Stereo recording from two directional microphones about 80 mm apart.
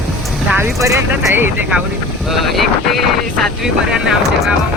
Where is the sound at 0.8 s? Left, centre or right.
Right.